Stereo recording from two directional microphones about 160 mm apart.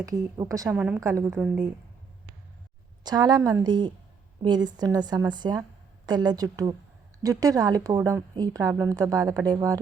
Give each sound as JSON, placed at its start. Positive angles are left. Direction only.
{"t": 0.0, "sound": "a woman's voice", "side_deg": -20}
{"t": 0.7, "sound": "a woman's voice", "side_deg": -10}
{"t": 0.9, "sound": "a woman's voice", "side_deg": -20}
{"t": 3.0, "sound": "a woman's voice", "side_deg": -25}